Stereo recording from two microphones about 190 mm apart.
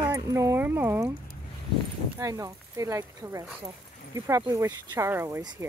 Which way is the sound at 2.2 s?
15° right (ahead or behind).